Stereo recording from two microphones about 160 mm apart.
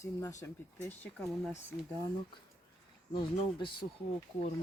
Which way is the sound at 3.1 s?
30° left (ahead or behind).